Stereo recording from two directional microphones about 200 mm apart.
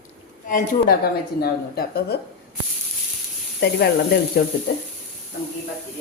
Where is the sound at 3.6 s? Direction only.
55° left (ahead or behind).